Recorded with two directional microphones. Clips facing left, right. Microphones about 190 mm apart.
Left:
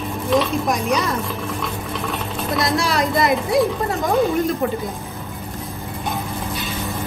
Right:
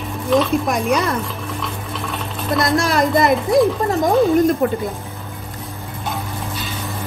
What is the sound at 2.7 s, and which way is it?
Speech, 50° right (ahead or behind).